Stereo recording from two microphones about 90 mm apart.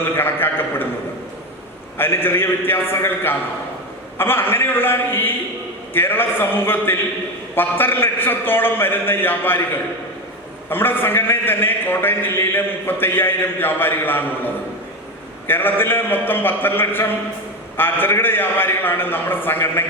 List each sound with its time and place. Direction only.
0.2 s a man's voice: 25° left (ahead or behind)
2.0 s a man's voice: 25° left (ahead or behind)
10.7 s a man's voice: 25° left (ahead or behind)